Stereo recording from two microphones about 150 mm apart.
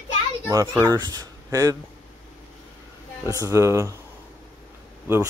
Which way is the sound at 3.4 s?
20° right (ahead or behind).